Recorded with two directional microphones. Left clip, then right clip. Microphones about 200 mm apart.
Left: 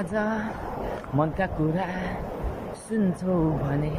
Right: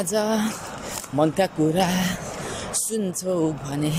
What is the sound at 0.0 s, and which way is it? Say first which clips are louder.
Speech: right 4 dB; 15° right (ahead or behind).